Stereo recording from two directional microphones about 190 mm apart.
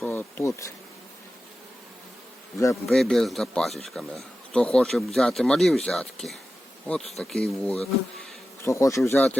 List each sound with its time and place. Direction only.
0.0 s bee: 10° left (ahead or behind)
2.8 s speech: centre (ahead or behind)
8.6 s bee: 15° left (ahead or behind)